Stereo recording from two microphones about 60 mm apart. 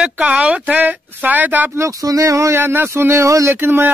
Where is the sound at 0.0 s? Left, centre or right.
Right.